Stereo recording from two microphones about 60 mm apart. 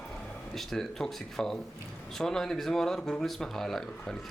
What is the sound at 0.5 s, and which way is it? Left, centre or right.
A man's voice, centre.